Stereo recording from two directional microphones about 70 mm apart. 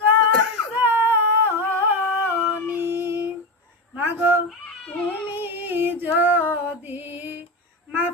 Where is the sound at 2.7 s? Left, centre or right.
Right.